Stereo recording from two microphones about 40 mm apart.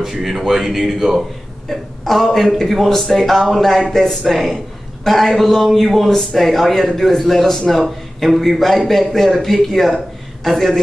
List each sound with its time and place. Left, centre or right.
0.0 s speech: centre
1.7 s a man's voice: centre